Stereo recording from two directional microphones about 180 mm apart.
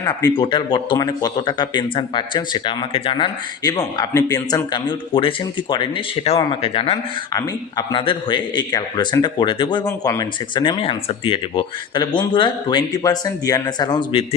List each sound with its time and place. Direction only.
0.0 s a man's voice: 25° left (ahead or behind)